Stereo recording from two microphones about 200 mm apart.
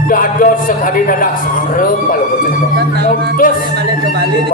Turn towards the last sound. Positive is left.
turn(degrees=40)  # may be behind; listen again after turning